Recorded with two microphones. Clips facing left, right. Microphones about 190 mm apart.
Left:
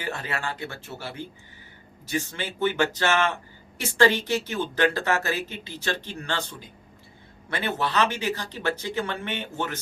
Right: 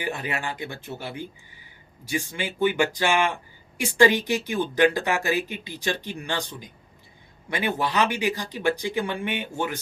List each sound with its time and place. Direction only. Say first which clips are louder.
0.0 s speech: right 2 dB; 15° right (ahead or behind)